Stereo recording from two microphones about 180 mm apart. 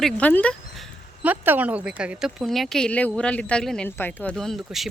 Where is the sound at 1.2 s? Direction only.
10° right (ahead or behind).